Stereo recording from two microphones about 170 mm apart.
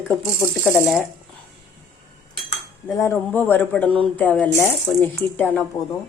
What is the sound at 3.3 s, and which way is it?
Speech, 10° left (ahead or behind).